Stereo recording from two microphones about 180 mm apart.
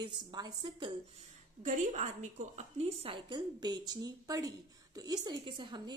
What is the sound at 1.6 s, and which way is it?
A woman's voice, 45° right (ahead or behind).